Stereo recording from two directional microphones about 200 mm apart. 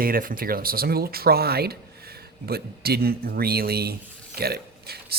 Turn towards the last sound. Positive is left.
turn(degrees=-50)  # may be behind; listen again after turning